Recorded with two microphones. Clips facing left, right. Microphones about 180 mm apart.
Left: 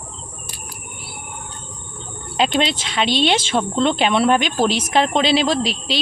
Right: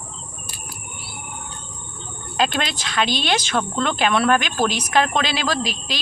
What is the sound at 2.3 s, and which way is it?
Speech, 25° left (ahead or behind).